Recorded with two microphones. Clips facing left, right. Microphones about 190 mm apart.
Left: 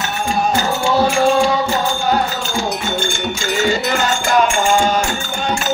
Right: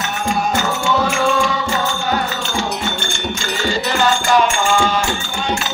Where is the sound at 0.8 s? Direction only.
35° left (ahead or behind).